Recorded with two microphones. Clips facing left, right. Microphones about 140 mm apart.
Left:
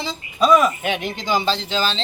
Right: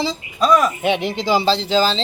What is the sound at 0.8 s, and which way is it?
Speech, 30° right (ahead or behind).